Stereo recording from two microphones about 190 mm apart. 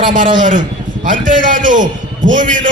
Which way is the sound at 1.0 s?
45° right (ahead or behind).